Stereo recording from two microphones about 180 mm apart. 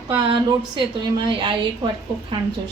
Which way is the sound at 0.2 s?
25° right (ahead or behind).